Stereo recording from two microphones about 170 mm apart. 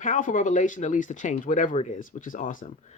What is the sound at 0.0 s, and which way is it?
Speech, 50° left (ahead or behind).